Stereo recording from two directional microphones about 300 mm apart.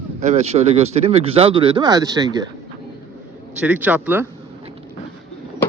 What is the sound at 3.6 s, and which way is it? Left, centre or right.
Speech, centre.